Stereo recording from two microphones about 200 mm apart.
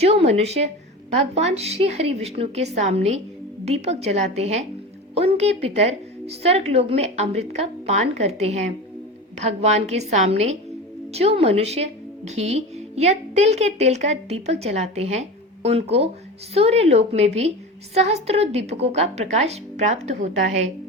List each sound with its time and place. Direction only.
0.0 s a woman's voice: 30° right (ahead or behind)